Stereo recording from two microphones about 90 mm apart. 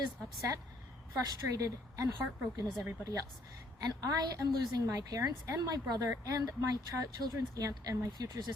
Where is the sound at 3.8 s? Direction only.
45° right (ahead or behind).